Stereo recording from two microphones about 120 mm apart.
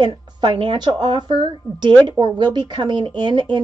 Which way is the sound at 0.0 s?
40° right (ahead or behind).